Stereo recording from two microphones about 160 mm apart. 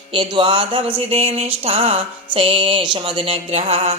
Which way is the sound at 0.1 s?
30° right (ahead or behind).